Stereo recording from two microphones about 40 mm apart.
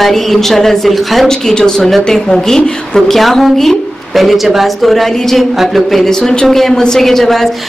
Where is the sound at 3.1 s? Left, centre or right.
Centre.